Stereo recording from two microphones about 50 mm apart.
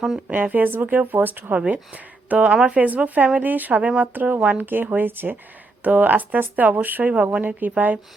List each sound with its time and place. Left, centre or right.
0.3 s speech: right
5.8 s speech: right